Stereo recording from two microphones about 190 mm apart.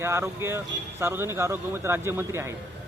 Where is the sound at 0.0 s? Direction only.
15° right (ahead or behind).